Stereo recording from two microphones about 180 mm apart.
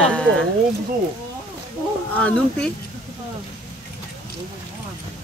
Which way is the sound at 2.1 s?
5° left (ahead or behind).